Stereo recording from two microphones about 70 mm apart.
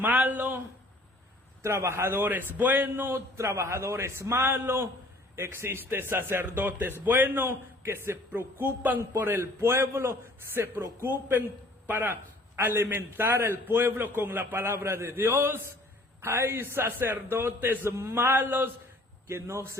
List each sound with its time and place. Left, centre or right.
0.0 s a man's voice: right
1.6 s a man's voice: right
11.0 s a man's voice: right
19.3 s a man's voice: right